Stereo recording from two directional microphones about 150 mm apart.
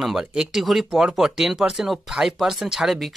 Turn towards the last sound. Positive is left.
turn(degrees=0)  # may be behind; listen again after turning